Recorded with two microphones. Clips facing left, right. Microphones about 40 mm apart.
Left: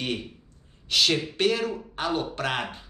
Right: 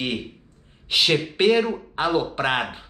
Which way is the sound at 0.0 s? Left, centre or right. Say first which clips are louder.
Right 3 dB; centre.